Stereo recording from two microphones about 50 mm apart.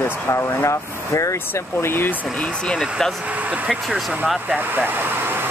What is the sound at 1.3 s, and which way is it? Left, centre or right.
Speech, left.